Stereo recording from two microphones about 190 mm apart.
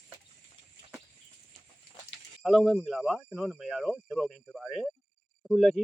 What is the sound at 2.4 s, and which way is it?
Speech, centre (ahead or behind).